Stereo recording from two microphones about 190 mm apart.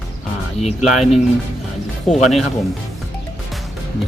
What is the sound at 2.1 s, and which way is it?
Speech, 40° left (ahead or behind).